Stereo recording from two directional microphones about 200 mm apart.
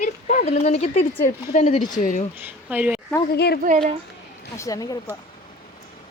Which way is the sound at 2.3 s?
10° right (ahead or behind).